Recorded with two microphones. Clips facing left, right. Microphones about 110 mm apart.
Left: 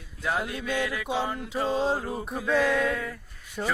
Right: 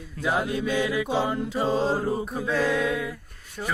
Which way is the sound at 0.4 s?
25° right (ahead or behind).